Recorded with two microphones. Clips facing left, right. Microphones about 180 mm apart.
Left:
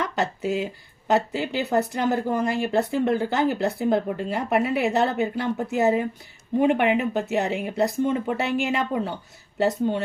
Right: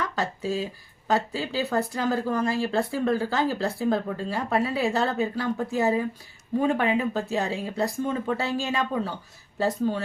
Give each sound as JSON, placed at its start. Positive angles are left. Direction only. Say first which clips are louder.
{"t": 0.0, "sound": "speech", "louder": "left 3 dB", "side_deg": 20}